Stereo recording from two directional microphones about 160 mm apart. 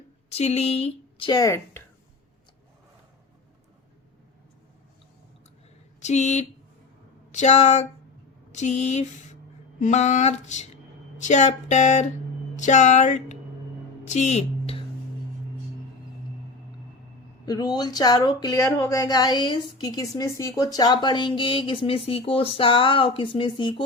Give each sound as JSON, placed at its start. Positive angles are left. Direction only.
{"t": 0.3, "sound": "speech", "side_deg": 40}
{"t": 1.3, "sound": "speech", "side_deg": 20}
{"t": 6.0, "sound": "speech", "side_deg": 45}
{"t": 7.3, "sound": "a sound", "side_deg": 45}
{"t": 14.1, "sound": "speech", "side_deg": 45}
{"t": 17.4, "sound": "speech", "side_deg": 25}